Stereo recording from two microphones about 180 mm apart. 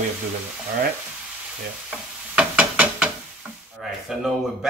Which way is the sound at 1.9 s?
5° right (ahead or behind).